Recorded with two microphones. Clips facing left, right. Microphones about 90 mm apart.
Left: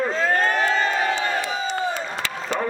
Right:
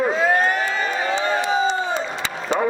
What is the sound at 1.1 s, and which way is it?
Crowd, 25° right (ahead or behind).